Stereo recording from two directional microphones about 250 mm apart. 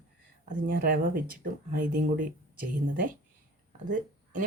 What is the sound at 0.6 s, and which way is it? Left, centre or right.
Speech, right.